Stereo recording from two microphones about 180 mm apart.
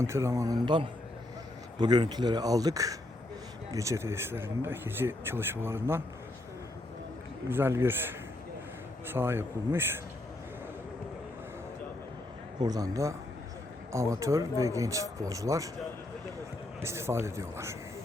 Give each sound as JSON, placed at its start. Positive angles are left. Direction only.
{"t": 0.0, "sound": "speech", "side_deg": -15}
{"t": 7.5, "sound": "speech", "side_deg": -15}
{"t": 9.1, "sound": "speech", "side_deg": -10}
{"t": 12.5, "sound": "speech", "side_deg": -20}
{"t": 16.8, "sound": "speech", "side_deg": -15}